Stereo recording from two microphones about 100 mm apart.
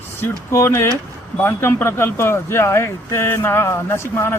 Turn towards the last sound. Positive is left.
turn(degrees=25)  # may be behind; listen again after turning